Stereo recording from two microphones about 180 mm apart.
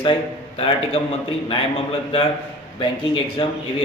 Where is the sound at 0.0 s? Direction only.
30° left (ahead or behind).